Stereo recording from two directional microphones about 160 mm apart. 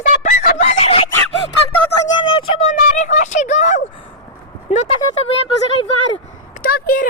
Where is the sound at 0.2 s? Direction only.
50° left (ahead or behind).